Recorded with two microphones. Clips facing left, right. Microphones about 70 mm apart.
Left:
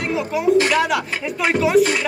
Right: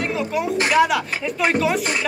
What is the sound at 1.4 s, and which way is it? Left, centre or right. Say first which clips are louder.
Speech: left 5 dB; centre.